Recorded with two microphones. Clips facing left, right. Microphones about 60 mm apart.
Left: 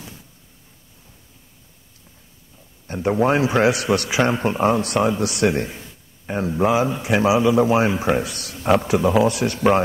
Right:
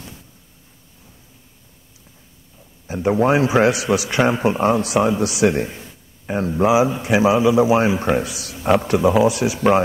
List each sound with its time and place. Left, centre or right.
2.9 s a man's voice: centre